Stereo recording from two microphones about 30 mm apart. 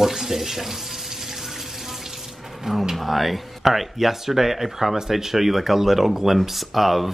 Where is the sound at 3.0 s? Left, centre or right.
Centre.